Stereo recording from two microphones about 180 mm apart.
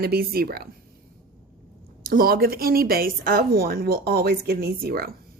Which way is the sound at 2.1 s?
55° right (ahead or behind).